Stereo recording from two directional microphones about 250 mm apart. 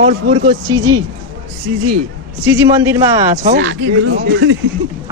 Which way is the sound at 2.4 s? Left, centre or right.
Centre.